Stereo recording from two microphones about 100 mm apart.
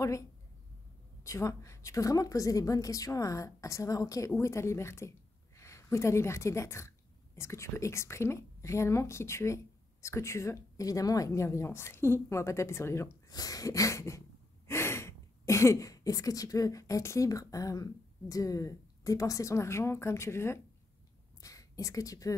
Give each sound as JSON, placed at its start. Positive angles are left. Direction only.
{"t": 1.2, "sound": "a woman's voice", "side_deg": 30}
{"t": 13.3, "sound": "a woman's voice", "side_deg": 40}